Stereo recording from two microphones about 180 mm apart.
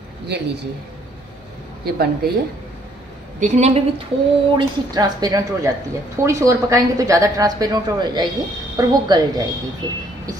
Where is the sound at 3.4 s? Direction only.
45° right (ahead or behind).